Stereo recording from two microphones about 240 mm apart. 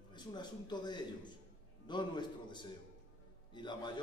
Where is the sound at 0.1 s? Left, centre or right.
Centre.